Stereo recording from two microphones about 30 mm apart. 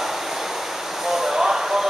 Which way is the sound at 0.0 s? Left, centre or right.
Centre.